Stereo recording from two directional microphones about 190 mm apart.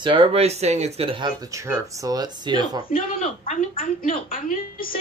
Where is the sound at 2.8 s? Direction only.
45° left (ahead or behind).